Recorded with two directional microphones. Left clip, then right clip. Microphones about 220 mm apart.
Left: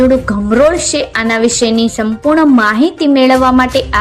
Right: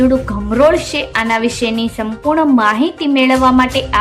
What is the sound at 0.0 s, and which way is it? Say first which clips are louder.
A woman's voice: left 4 dB; 20° left (ahead or behind).